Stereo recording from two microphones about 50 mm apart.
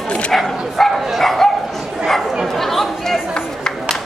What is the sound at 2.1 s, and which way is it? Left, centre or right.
Chatter, centre.